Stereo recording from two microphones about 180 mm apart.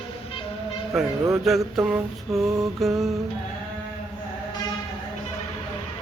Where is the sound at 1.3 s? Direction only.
Centre (ahead or behind).